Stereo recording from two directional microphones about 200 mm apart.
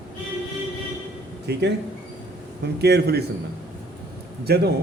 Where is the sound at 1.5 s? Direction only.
55° right (ahead or behind).